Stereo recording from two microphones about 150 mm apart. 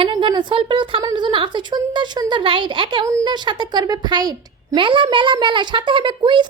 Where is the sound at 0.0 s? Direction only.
35° right (ahead or behind).